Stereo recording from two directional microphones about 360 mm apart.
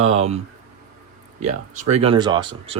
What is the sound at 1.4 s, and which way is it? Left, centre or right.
Speech, centre.